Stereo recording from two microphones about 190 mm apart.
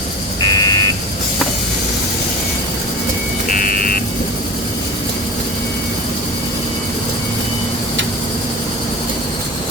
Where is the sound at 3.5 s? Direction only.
50° left (ahead or behind).